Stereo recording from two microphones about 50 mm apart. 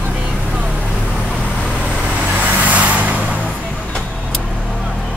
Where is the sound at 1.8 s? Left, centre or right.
Right.